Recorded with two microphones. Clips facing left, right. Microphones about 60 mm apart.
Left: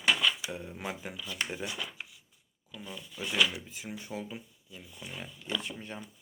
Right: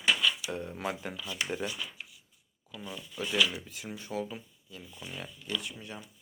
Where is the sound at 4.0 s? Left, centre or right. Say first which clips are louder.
Right 7 dB; centre.